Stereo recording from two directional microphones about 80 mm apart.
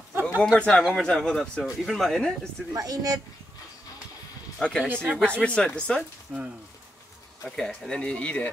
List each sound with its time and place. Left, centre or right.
0.4 s speech: centre
2.7 s speech: right
4.6 s speech: centre
6.3 s speech: centre
7.4 s speech: centre